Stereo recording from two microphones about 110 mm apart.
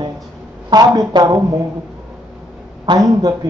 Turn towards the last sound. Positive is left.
turn(degrees=-35)  # may be behind; listen again after turning